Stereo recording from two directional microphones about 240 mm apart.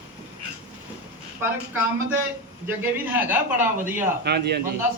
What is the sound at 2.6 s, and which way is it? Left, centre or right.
A man's voice, centre.